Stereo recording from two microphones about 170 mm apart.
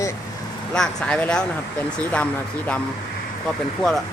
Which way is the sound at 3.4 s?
5° left (ahead or behind).